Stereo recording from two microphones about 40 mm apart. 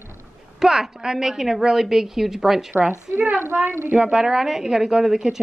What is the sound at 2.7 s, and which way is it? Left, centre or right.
Speech, right.